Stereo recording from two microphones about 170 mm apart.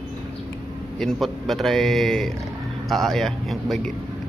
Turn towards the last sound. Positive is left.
turn(degrees=0)  # may be behind; listen again after turning